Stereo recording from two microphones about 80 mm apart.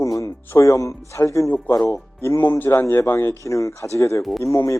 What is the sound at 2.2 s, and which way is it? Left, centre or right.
A man's voice, left.